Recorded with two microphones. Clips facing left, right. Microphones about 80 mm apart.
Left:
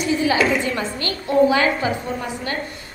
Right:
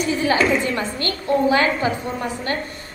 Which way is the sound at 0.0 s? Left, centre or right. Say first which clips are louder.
Even; right.